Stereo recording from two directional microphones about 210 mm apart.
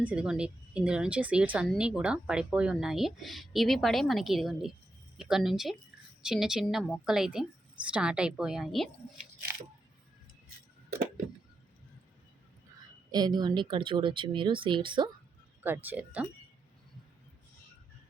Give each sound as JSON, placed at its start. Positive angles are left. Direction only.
{"t": 0.0, "sound": "a woman's voice", "side_deg": -5}
{"t": 13.1, "sound": "speech", "side_deg": -20}
{"t": 15.6, "sound": "speech", "side_deg": -10}